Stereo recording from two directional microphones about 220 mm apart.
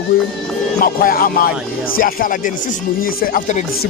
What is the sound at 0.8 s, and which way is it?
A man's voice, 40° left (ahead or behind).